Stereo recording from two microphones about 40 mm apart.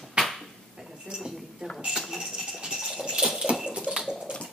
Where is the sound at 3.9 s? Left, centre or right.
Centre.